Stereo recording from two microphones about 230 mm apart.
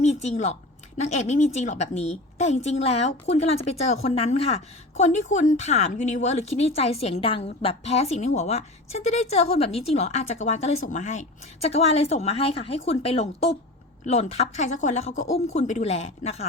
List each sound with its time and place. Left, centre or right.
0.0 s a woman's voice: left